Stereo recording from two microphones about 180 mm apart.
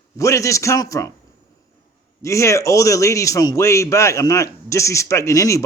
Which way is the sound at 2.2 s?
15° left (ahead or behind).